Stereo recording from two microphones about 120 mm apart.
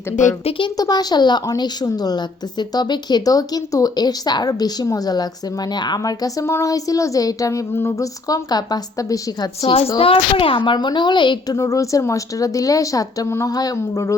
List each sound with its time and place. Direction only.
0.4 s speech: 45° left (ahead or behind)
0.8 s a woman's voice: 35° left (ahead or behind)
10.0 s a woman's voice: 50° left (ahead or behind)
11.5 s speech: 25° left (ahead or behind)